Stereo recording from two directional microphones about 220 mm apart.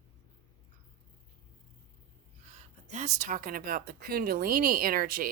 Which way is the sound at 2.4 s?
30° right (ahead or behind).